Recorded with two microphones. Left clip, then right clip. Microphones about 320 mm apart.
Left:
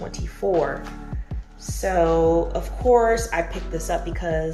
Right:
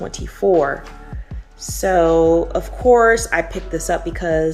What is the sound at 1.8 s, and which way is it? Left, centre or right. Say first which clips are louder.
Speech: right 5 dB; centre.